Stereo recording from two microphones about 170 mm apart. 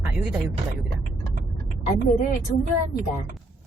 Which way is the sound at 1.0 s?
50° right (ahead or behind).